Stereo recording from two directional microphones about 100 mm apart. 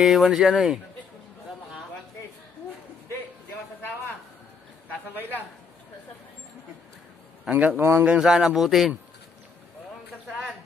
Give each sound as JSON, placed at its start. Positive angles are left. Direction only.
{"t": 0.0, "sound": "speech", "side_deg": -5}
{"t": 7.5, "sound": "a man's voice", "side_deg": -15}
{"t": 10.2, "sound": "a sound", "side_deg": -5}